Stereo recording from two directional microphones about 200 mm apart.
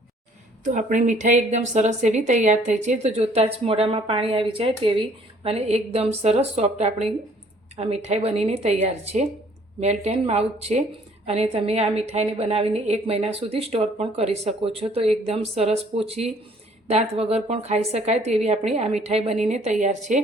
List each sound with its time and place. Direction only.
0.6 s a woman's voice: 40° right (ahead or behind)